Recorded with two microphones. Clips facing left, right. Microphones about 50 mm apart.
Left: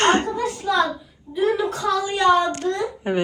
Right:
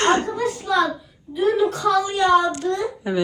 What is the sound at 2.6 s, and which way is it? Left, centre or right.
Speech, left.